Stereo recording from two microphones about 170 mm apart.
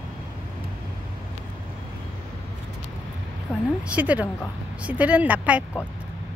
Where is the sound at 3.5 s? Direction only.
15° left (ahead or behind).